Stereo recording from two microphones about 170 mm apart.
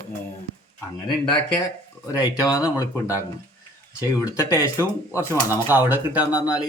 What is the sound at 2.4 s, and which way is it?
Speech, 20° left (ahead or behind).